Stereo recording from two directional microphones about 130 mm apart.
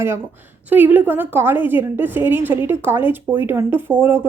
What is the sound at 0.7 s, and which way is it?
A woman's voice, 15° right (ahead or behind).